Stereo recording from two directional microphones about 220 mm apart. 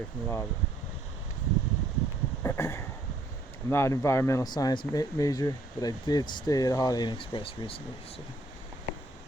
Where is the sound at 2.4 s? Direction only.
10° left (ahead or behind).